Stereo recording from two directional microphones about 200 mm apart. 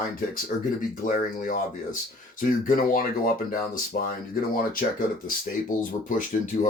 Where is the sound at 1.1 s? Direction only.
40° left (ahead or behind).